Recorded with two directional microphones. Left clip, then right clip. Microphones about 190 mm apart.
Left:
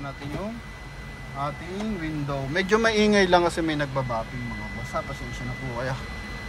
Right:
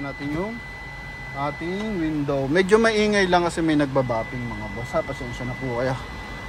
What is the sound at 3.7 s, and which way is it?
Speech, 30° right (ahead or behind).